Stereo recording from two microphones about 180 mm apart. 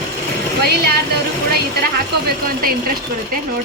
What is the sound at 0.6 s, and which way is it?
Speech, 60° right (ahead or behind).